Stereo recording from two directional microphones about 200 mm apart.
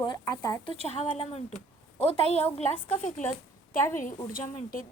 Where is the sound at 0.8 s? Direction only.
35° left (ahead or behind).